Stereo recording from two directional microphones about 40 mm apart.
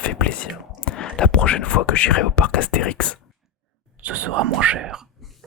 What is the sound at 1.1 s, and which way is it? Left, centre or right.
Speech, left.